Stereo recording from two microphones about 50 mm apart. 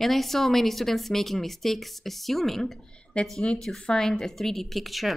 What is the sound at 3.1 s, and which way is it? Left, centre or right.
Speech, left.